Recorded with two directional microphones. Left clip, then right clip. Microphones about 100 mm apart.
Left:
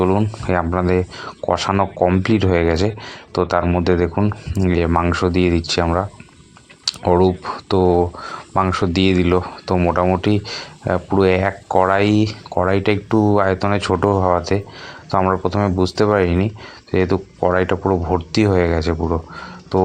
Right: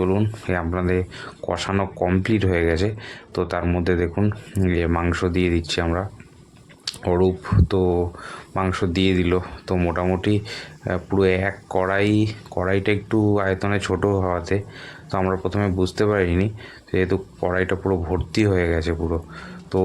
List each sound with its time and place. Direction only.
0.4 s speech: 25° left (ahead or behind)
2.2 s speech: 25° left (ahead or behind)
4.2 s speech: 10° left (ahead or behind)
4.6 s speech: 25° left (ahead or behind)
4.9 s speech: 15° left (ahead or behind)